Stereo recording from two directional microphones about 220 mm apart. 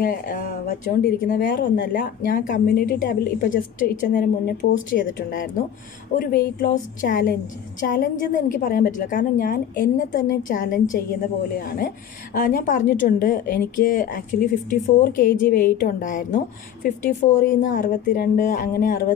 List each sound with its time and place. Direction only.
0.0 s a woman's voice: 45° left (ahead or behind)
12.4 s speech: 35° left (ahead or behind)